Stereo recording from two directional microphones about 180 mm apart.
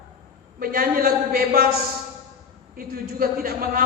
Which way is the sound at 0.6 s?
55° right (ahead or behind).